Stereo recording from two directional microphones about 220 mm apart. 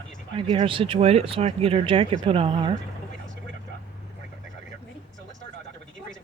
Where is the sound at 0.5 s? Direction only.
25° right (ahead or behind).